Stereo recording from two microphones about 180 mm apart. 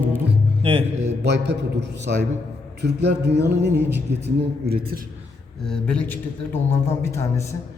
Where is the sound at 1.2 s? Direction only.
70° right (ahead or behind).